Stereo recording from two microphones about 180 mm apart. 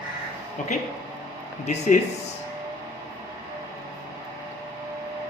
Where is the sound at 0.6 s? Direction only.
45° left (ahead or behind).